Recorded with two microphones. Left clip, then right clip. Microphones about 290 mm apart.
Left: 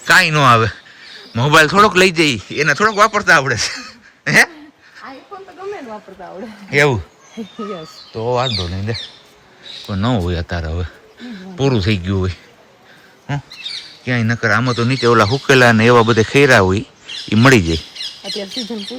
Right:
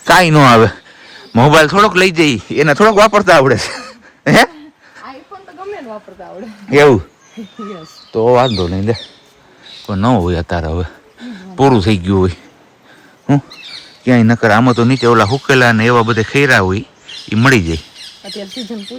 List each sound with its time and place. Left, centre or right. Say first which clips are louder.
0.0 s a man's voice: right 3 dB; centre
6.7 s a man's voice: right 6 dB; centre
8.4 s a man's voice: right 6 dB; centre
14.0 s a man's voice: right 7 dB; centre